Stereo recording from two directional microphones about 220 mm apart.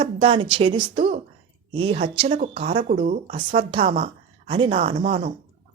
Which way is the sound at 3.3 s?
25° right (ahead or behind).